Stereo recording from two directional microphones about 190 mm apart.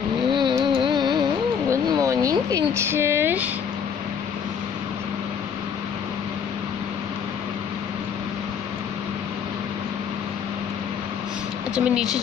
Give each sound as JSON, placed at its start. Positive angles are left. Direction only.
{"t": 0.3, "sound": "vehicle", "side_deg": -25}
{"t": 0.7, "sound": "music", "side_deg": -25}
{"t": 1.7, "sound": "a sound", "side_deg": -15}
{"t": 11.7, "sound": "speech", "side_deg": -5}